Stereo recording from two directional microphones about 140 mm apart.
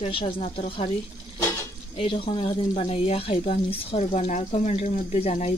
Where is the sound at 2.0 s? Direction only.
40° left (ahead or behind).